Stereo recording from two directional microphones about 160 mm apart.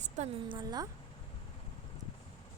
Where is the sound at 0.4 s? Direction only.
30° right (ahead or behind).